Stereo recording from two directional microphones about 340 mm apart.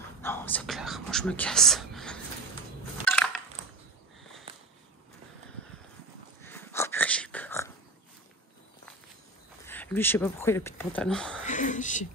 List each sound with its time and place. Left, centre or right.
0.2 s speech: centre
4.2 s sniff: centre
6.4 s a sound: centre
9.7 s speech: centre
11.4 s speech: left